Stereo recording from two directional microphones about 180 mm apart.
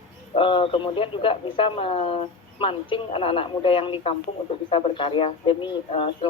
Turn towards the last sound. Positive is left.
turn(degrees=30)  # may be behind; listen again after turning